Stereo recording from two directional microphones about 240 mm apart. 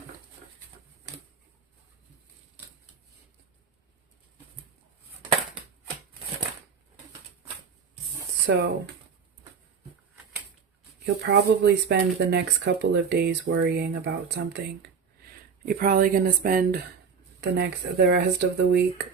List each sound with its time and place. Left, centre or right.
8.4 s speech: right
11.0 s speech: right